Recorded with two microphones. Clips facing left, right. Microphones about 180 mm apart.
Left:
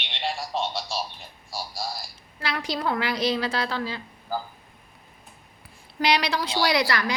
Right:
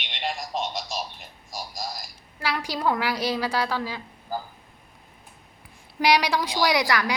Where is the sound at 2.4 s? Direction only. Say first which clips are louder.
Right 2 dB; 10° right (ahead or behind).